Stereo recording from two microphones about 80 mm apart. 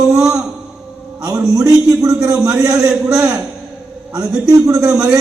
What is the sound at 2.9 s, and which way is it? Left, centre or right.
Speech, centre.